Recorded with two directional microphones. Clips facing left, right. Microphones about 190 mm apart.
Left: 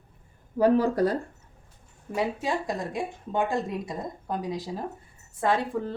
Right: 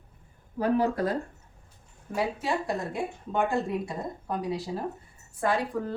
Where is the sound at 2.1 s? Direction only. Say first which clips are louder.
Left 1 dB; 20° left (ahead or behind).